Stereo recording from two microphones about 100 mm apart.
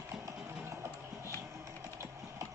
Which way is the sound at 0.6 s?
25° right (ahead or behind).